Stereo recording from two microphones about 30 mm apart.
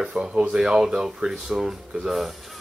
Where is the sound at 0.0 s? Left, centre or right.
Right.